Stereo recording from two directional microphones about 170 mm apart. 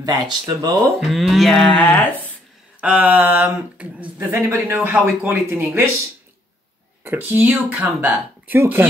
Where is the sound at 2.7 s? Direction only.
10° right (ahead or behind).